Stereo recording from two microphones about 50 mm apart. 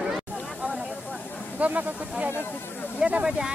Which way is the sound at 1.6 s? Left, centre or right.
Right.